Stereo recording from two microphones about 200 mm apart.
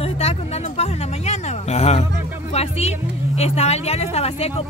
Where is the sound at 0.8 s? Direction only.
35° left (ahead or behind).